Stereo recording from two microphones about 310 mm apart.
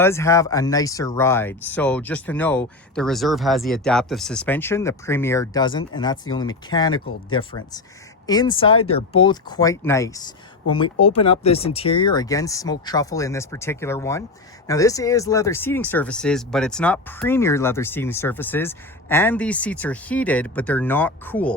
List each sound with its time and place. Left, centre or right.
0.0 s speech: centre